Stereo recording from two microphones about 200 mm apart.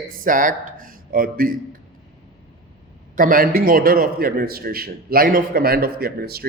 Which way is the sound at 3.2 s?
45° right (ahead or behind).